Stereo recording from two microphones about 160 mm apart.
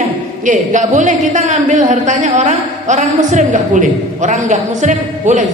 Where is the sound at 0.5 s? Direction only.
50° right (ahead or behind).